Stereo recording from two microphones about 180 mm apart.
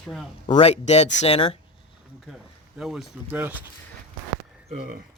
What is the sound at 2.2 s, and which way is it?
Speech, centre (ahead or behind).